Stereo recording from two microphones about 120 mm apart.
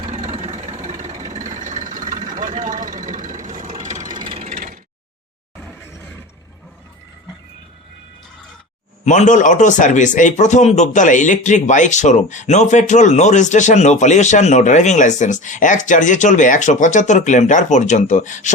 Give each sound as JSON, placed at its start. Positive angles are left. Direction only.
{"t": 0.1, "sound": "vehicle", "side_deg": -70}
{"t": 4.0, "sound": "vehicle", "side_deg": -40}
{"t": 5.5, "sound": "a sound", "side_deg": 15}
{"t": 9.0, "sound": "a man's voice", "side_deg": 90}